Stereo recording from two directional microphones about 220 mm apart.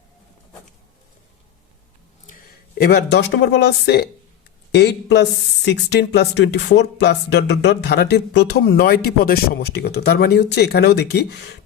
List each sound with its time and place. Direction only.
2.2 s speech: 40° left (ahead or behind)